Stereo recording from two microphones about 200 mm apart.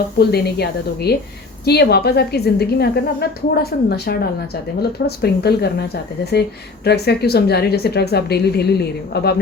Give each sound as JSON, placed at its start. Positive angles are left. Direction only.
{"t": 0.2, "sound": "a woman's voice", "side_deg": 55}